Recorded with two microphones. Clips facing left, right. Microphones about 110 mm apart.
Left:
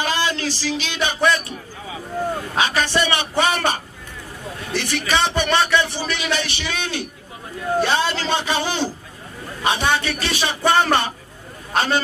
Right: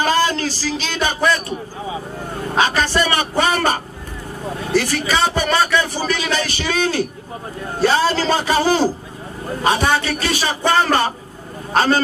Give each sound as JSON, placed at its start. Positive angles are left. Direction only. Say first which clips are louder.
{"t": 0.0, "sound": "a sound", "louder": "right 5 dB", "side_deg": -40}
{"t": 2.5, "sound": "a man's voice", "louder": "right 4 dB", "side_deg": -40}
{"t": 10.6, "sound": "speech", "louder": "even", "side_deg": 0}
{"t": 10.9, "sound": "a man's voice", "louder": "right 2 dB", "side_deg": -40}